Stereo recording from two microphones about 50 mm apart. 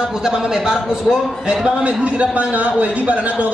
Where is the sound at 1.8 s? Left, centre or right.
Right.